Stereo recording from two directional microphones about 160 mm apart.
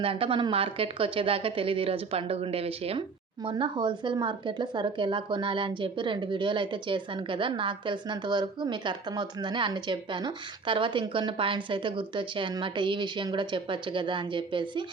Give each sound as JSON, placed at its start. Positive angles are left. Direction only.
{"t": 0.0, "sound": "speech", "side_deg": -35}